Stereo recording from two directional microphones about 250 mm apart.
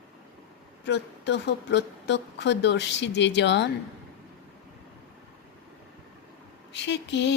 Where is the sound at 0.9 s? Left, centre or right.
Left.